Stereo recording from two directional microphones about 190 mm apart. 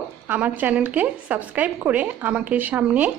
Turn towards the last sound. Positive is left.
turn(degrees=-10)  # may be behind; listen again after turning